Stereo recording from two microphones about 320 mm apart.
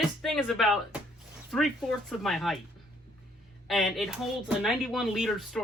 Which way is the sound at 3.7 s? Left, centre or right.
Centre.